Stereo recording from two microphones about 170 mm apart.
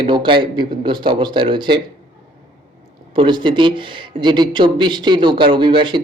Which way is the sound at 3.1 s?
30° right (ahead or behind).